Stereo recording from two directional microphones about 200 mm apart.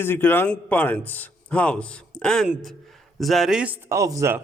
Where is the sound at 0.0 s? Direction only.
10° left (ahead or behind).